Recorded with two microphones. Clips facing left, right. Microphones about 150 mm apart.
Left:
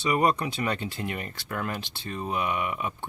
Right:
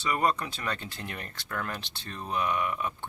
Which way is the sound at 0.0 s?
15° left (ahead or behind).